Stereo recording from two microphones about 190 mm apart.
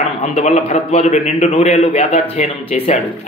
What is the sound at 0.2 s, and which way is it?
A man's voice, 35° left (ahead or behind).